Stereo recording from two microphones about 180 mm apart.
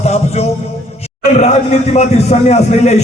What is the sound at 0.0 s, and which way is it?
A man's voice, 35° left (ahead or behind).